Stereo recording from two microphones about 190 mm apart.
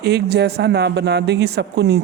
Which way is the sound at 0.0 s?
60° right (ahead or behind).